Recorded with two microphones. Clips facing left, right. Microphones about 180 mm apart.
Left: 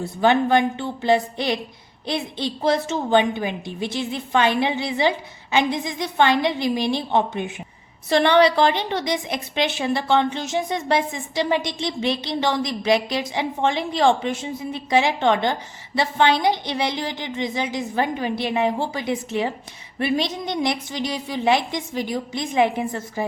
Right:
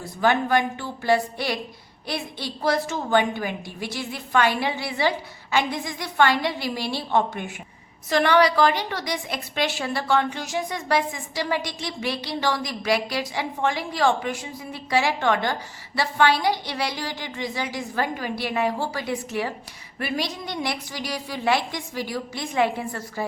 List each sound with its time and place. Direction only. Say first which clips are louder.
0.0 s a woman's voice: left 4 dB; 25° left (ahead or behind)